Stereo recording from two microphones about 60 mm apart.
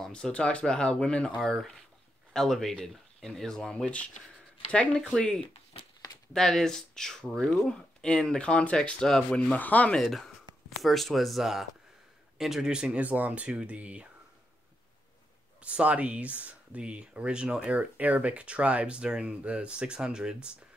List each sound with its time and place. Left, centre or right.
0.1 s speech: centre
1.4 s speech: centre
5.2 s speech: centre
6.3 s speech: centre
9.4 s speech: left
9.9 s speech: centre; by 14.0 s right
15.6 s speech: right